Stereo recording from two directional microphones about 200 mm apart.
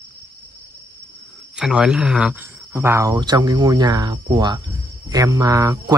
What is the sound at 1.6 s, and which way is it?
Speech, 5° right (ahead or behind).